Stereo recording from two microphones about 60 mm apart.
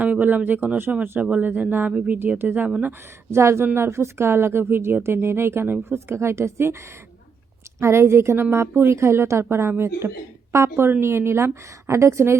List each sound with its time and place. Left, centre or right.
0.0 s speech: right
3.3 s speech: right
7.8 s speech: right